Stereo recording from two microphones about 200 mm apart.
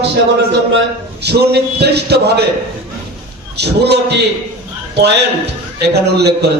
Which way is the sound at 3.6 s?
55° right (ahead or behind).